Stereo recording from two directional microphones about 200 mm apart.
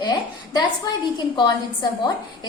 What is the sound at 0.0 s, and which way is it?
A woman's voice, 20° left (ahead or behind).